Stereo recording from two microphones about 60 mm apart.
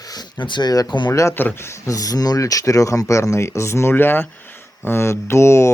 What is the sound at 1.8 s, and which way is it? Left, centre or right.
Speech, left.